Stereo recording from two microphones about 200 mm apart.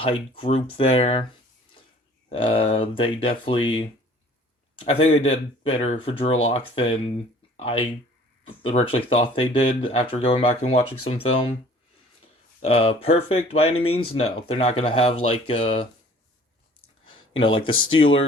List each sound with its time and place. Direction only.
0.0 s speech: 25° left (ahead or behind)
2.3 s speech: 25° left (ahead or behind)
12.6 s speech: 30° left (ahead or behind)
17.4 s speech: 25° left (ahead or behind)